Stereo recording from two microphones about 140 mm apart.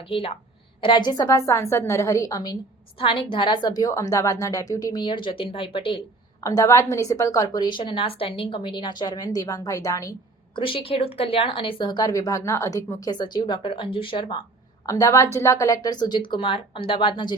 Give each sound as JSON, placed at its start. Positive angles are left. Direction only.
{"t": 0.0, "sound": "a woman's voice", "side_deg": 40}
{"t": 3.0, "sound": "speech", "side_deg": 40}
{"t": 6.4, "sound": "a woman's voice", "side_deg": 25}
{"t": 10.5, "sound": "speech", "side_deg": 40}
{"t": 14.8, "sound": "a woman's voice", "side_deg": 25}